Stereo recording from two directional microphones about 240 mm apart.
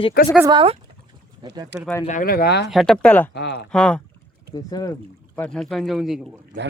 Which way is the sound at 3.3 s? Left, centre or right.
Left.